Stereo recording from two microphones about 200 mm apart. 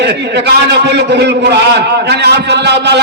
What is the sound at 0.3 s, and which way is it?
A man's voice, 55° right (ahead or behind).